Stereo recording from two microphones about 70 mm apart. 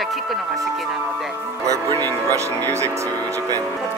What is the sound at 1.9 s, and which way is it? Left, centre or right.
Speech, right.